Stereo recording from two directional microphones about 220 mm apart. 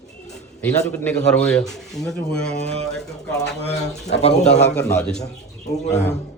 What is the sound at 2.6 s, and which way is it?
Speech, 30° right (ahead or behind).